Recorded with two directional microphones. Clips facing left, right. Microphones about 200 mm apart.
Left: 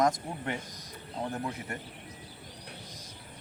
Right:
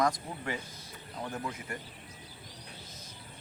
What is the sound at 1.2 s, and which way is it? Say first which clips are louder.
Speech: left 4 dB; 30° left (ahead or behind).